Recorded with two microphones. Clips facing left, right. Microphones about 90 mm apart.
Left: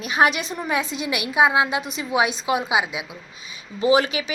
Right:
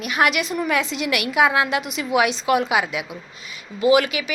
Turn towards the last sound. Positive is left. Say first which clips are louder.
# right 2 dB
turn(degrees=30)  # may be behind; listen again after turning